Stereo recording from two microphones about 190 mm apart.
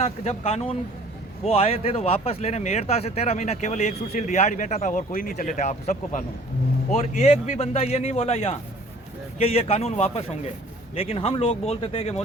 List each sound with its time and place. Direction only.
0.0 s speech: 35° left (ahead or behind)